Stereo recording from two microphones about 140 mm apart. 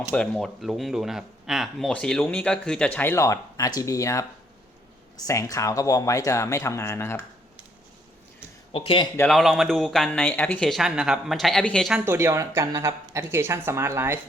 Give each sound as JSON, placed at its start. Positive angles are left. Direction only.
{"t": 0.1, "sound": "speech", "side_deg": 5}
{"t": 8.7, "sound": "speech", "side_deg": 40}
{"t": 9.2, "sound": "speech", "side_deg": 0}
{"t": 11.9, "sound": "speech", "side_deg": -20}